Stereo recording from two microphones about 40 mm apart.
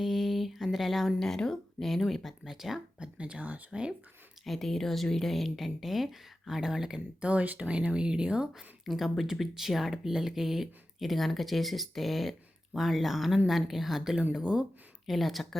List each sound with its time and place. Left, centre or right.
0.0 s a sound: centre
0.9 s speech: centre
1.2 s speech: centre
3.0 s speech: right
3.7 s speech: right
4.4 s speech: centre
7.2 s speech: right
8.8 s speech: centre
14.4 s speech: right
15.0 s speech: centre